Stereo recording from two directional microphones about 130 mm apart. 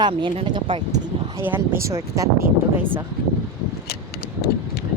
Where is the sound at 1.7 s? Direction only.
25° right (ahead or behind).